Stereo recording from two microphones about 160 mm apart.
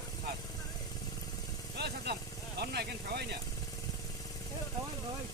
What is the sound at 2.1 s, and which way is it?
Speech, 90° right.